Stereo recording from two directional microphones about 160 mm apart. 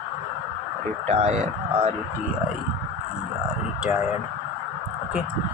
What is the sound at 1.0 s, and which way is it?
Speech, 40° right (ahead or behind).